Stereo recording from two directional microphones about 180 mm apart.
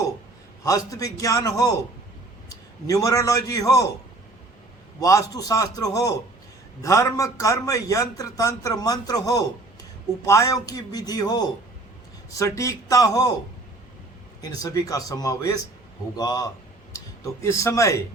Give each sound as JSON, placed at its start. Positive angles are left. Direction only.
{"t": 0.6, "sound": "a man's voice", "side_deg": 20}
{"t": 4.9, "sound": "a man's voice", "side_deg": 15}
{"t": 14.4, "sound": "a man's voice", "side_deg": 20}